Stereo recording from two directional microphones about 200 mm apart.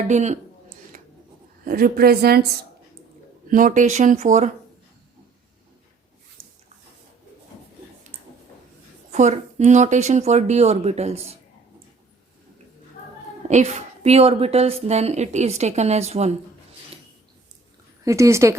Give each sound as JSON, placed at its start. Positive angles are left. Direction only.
{"t": 0.1, "sound": "a woman's voice", "side_deg": -35}
{"t": 1.6, "sound": "a woman's voice", "side_deg": -45}
{"t": 3.5, "sound": "a woman's voice", "side_deg": -40}
{"t": 9.1, "sound": "a woman's voice", "side_deg": -35}
{"t": 13.5, "sound": "a woman's voice", "side_deg": -35}
{"t": 18.0, "sound": "speech", "side_deg": -15}